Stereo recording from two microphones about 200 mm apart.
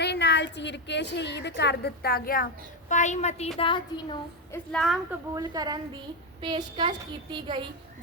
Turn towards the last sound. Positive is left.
turn(degrees=-25)  # may be behind; listen again after turning